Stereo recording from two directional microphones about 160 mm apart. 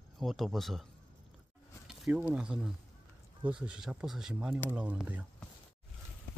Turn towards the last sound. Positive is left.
turn(degrees=-10)  # may be behind; listen again after turning